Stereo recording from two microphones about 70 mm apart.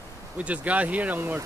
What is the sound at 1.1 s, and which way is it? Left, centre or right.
Speech, right.